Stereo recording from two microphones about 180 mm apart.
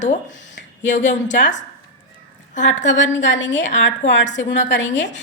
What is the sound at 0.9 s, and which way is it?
Speech, 40° left (ahead or behind).